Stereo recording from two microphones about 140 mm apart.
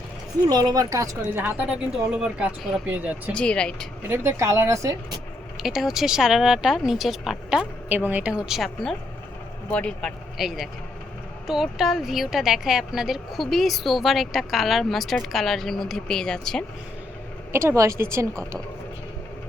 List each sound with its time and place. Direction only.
0.4 s a woman's voice: 30° right (ahead or behind); by 3.3 s 10° right (ahead or behind)
3.3 s speech: 5° left (ahead or behind)
4.1 s a woman's voice: 20° right (ahead or behind)
5.6 s speech: centre (ahead or behind)
17.5 s a woman's voice: 20° right (ahead or behind)